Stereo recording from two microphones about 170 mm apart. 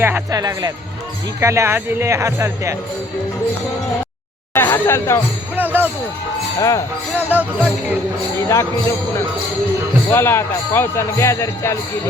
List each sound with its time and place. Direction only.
0.0 s speech: 15° right (ahead or behind)
4.5 s speech: 15° left (ahead or behind)
5.5 s speech: 10° right (ahead or behind)
6.6 s speech: 20° left (ahead or behind)
7.3 s speech: 10° right (ahead or behind)
10.1 s speech: 15° left (ahead or behind)